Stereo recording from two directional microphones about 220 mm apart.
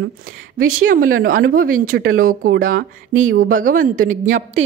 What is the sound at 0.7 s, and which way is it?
A woman's voice, 40° right (ahead or behind).